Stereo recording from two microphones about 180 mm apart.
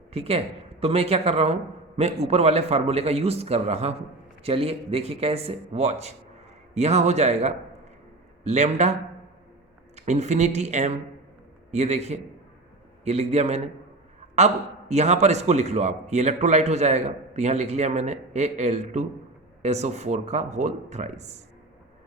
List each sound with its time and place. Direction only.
0.1 s a man's voice: 35° right (ahead or behind)